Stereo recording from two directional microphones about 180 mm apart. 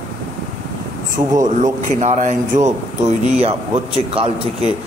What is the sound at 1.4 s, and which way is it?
A man's voice, 45° right (ahead or behind).